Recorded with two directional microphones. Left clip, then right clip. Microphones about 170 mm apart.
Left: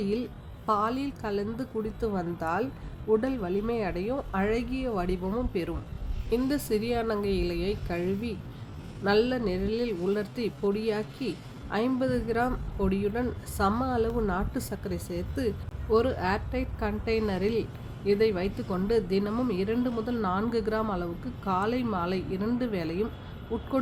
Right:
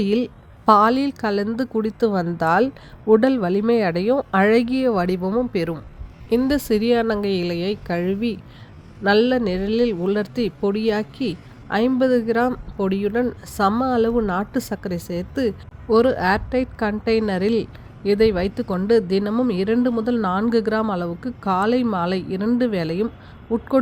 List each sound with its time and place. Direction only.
0.0 s a woman's voice: 40° right (ahead or behind)